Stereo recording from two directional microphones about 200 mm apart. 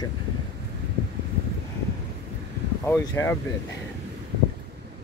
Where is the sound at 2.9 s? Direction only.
10° left (ahead or behind).